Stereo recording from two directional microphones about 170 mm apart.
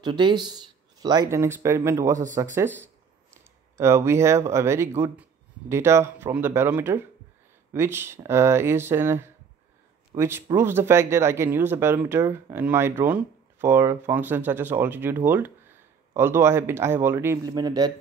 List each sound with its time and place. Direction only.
0.0 s speech: 25° right (ahead or behind)
3.7 s speech: 15° right (ahead or behind)